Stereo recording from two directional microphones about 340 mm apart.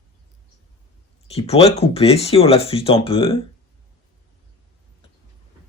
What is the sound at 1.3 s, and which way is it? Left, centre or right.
Speech, centre.